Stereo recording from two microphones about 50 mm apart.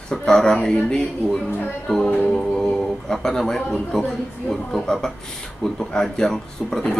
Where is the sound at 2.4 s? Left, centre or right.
Centre.